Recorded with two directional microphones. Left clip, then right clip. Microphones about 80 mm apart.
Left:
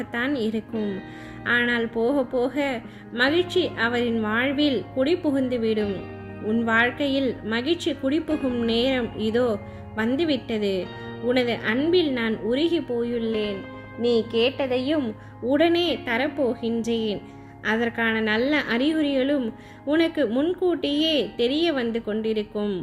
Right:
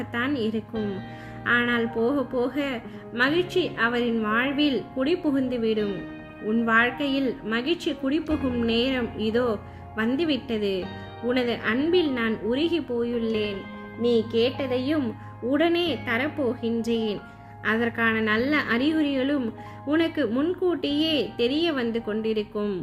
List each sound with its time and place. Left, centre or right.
0.0 s speech: left
1.5 s a woman's voice: left
8.3 s a child's voice: centre
8.6 s a woman's voice: left
13.3 s a child's voice: centre
15.4 s a woman's voice: left